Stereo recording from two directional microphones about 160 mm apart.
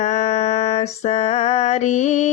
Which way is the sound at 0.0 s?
50° left (ahead or behind).